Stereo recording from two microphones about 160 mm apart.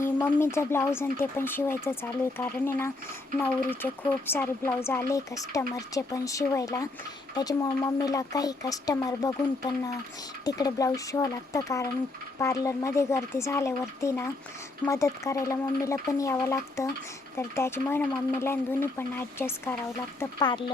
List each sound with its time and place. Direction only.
0.0 s speech: 15° left (ahead or behind)
20.4 s speech: 25° left (ahead or behind)